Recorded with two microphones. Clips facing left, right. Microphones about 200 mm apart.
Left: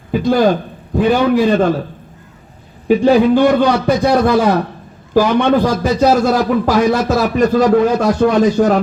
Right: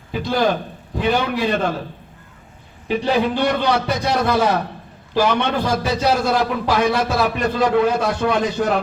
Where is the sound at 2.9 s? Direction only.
50° left (ahead or behind).